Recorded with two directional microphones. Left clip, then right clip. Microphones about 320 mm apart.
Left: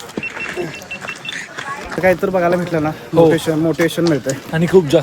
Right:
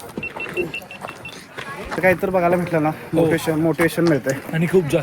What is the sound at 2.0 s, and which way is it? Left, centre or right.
Speech, centre.